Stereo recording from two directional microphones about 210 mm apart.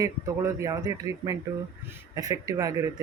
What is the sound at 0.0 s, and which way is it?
Speech, 15° right (ahead or behind).